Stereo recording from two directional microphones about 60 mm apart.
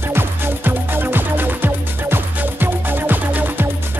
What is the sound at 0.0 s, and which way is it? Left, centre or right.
Music, right.